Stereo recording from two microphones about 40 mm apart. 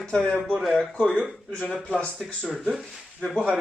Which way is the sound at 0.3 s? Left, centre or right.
Right.